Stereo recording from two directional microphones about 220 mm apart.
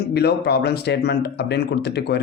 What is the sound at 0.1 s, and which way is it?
Speech, 50° left (ahead or behind).